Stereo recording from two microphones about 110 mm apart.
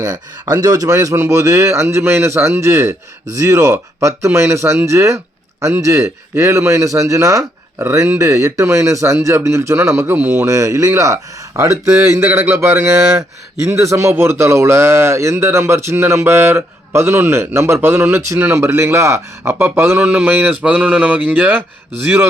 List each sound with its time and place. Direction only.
0.0 s speech: 35° right (ahead or behind); by 10.4 s 15° right (ahead or behind)
10.4 s speech: 30° right (ahead or behind)
20.0 s a sound: 15° right (ahead or behind)
22.0 s speech: 20° right (ahead or behind)